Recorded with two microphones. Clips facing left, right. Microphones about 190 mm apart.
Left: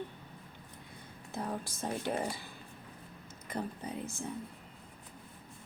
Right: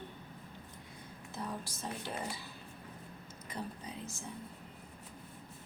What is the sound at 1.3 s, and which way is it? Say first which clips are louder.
A woman's voice: left 4 dB; 50° left (ahead or behind).